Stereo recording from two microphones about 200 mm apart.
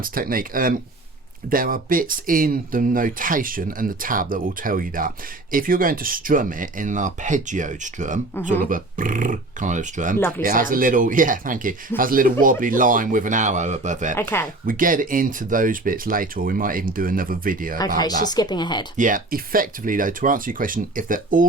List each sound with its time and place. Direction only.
0.0 s speech: 45° right (ahead or behind)
10.2 s speech: 10° left (ahead or behind)
10.4 s speech: 45° right (ahead or behind)
14.2 s speech: 10° left (ahead or behind)
14.7 s speech: 45° right (ahead or behind)
17.7 s speech: 20° left (ahead or behind)
18.9 s speech: 40° right (ahead or behind)